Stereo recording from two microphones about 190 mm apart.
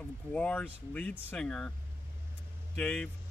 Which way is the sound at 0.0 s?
5° left (ahead or behind).